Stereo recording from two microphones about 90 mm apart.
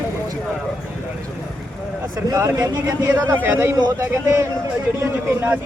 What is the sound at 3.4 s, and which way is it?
A man's voice, 25° right (ahead or behind).